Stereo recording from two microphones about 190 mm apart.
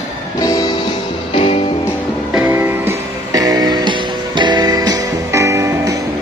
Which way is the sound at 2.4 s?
15° right (ahead or behind).